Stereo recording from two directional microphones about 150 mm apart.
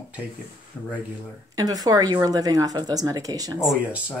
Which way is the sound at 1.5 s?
25° right (ahead or behind).